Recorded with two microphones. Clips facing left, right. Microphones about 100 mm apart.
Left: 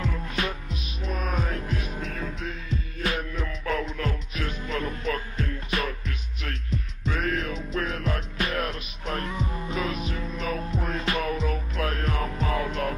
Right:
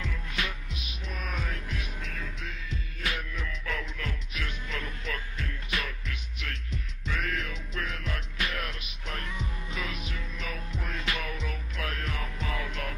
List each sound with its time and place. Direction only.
0.0 s music: 40° left (ahead or behind)